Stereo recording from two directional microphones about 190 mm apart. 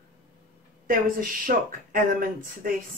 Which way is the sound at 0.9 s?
45° right (ahead or behind).